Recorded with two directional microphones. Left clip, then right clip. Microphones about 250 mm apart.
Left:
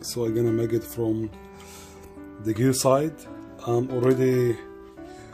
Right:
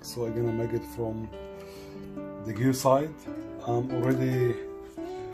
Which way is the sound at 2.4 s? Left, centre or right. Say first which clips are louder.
Left 4 dB; left.